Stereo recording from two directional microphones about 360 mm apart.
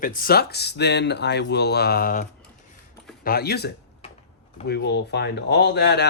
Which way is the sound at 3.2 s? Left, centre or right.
Left.